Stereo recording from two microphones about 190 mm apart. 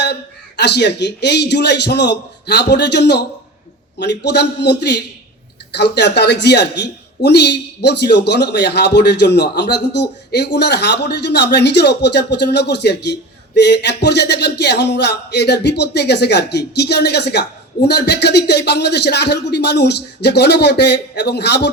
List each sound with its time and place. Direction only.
0.0 s a man's voice: 60° left (ahead or behind)